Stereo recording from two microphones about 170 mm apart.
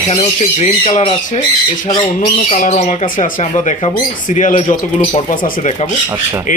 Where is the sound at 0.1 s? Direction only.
40° left (ahead or behind).